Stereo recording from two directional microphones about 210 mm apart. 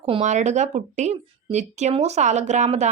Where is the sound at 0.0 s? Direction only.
30° right (ahead or behind).